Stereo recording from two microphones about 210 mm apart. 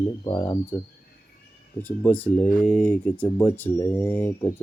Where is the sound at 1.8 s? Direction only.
10° left (ahead or behind).